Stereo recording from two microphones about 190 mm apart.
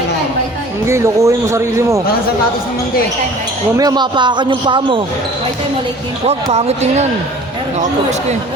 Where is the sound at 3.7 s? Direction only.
20° right (ahead or behind).